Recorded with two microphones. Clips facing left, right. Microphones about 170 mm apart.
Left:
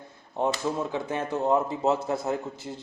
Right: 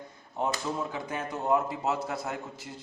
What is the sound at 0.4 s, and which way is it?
Speech, 25° left (ahead or behind).